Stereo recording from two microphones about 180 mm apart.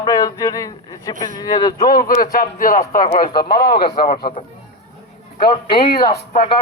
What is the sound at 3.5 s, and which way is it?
Speech, 65° left (ahead or behind).